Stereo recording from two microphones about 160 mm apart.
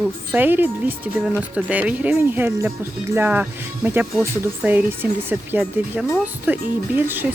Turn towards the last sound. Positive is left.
turn(degrees=-10)  # may be behind; listen again after turning